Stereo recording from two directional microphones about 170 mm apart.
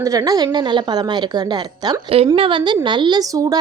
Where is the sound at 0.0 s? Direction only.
20° right (ahead or behind).